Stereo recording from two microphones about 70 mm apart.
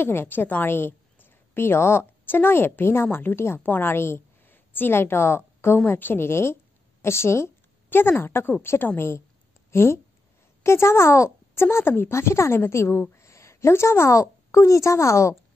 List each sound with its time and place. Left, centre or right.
0.0 s a woman's voice: left